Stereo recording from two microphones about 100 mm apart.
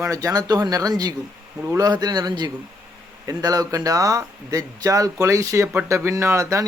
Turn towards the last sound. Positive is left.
turn(degrees=-30)  # may be behind; listen again after turning